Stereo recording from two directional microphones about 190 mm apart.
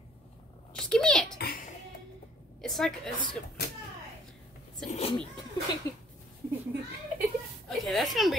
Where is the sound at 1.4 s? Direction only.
50° left (ahead or behind).